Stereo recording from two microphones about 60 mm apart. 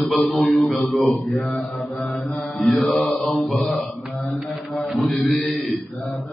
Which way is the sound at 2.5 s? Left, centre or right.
Centre.